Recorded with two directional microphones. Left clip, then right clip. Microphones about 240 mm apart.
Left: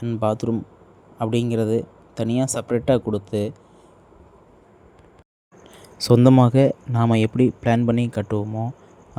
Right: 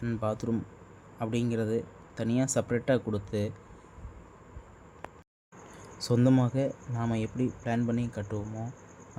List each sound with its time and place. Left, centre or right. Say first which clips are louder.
0.0 s speech: left 10 dB; left
5.8 s speech: left 12 dB; left